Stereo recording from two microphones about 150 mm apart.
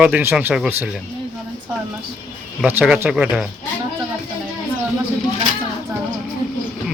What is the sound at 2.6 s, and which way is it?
Speech, 10° right (ahead or behind).